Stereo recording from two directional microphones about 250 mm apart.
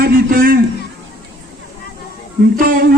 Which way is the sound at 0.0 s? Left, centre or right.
Right.